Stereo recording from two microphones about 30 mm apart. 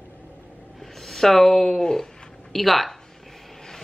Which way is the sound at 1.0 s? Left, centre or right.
Centre.